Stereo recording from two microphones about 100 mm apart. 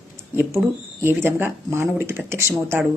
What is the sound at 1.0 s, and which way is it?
A woman's voice, 20° right (ahead or behind).